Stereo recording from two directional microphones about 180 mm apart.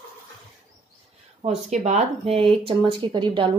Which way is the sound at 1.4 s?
30° right (ahead or behind).